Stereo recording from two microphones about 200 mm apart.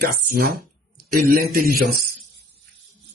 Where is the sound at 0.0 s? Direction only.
50° right (ahead or behind).